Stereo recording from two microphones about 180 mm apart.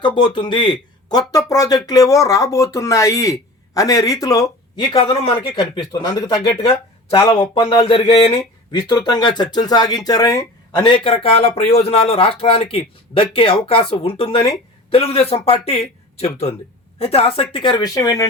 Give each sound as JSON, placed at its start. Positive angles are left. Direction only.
{"t": 0.0, "sound": "speech", "side_deg": 25}